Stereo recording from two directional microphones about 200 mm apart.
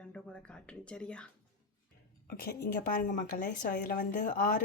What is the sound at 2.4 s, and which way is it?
A woman's voice, 45° left (ahead or behind).